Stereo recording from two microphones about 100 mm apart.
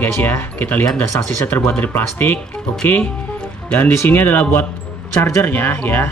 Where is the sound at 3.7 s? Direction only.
20° left (ahead or behind).